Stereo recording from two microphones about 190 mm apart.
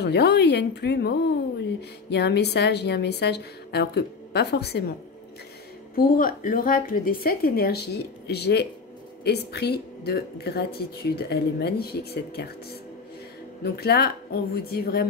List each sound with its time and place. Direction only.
0.0 s speech: 60° left (ahead or behind)
5.9 s a woman's voice: 45° left (ahead or behind)
13.7 s speech: 55° left (ahead or behind)